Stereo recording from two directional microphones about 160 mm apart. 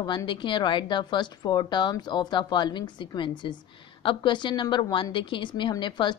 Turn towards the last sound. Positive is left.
turn(degrees=30)  # may be behind; listen again after turning